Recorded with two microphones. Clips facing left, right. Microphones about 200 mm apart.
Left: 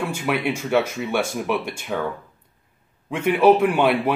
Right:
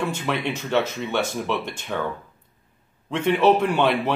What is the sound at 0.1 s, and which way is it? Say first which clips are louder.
Speech: left 3 dB; 10° left (ahead or behind).